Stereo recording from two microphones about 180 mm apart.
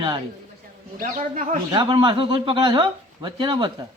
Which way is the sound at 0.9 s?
50° right (ahead or behind).